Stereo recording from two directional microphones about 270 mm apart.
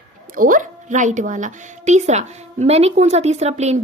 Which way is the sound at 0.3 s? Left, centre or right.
Right.